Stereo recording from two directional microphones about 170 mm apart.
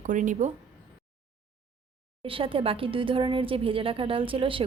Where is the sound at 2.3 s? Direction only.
30° right (ahead or behind).